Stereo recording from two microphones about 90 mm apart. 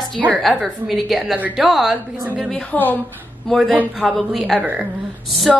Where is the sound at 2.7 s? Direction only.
20° left (ahead or behind).